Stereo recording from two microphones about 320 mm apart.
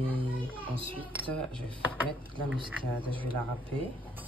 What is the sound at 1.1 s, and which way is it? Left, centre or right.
Speech, centre.